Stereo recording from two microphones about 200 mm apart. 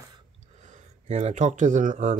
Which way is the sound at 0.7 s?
35° right (ahead or behind).